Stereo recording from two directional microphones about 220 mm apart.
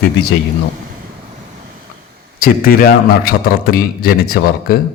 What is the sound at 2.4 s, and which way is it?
A man's voice, 40° left (ahead or behind).